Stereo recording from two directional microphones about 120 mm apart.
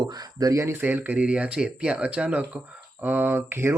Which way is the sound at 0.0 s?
35° right (ahead or behind).